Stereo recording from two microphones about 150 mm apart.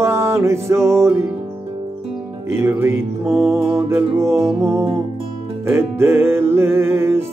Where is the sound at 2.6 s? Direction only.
15° right (ahead or behind).